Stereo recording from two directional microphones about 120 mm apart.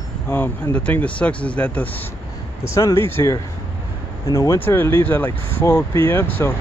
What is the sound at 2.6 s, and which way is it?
Speech, 25° left (ahead or behind).